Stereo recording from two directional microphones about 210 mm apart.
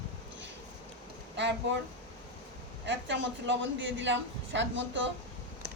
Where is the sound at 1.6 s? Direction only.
55° right (ahead or behind).